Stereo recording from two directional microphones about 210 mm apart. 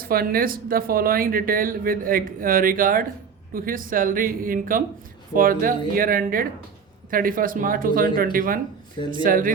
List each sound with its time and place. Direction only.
0.0 s speech: 45° right (ahead or behind)